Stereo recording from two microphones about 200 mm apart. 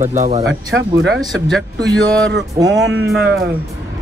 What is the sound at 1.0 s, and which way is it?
Speech, centre (ahead or behind).